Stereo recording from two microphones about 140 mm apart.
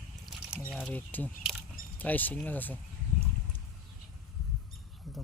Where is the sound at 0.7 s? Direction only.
10° left (ahead or behind).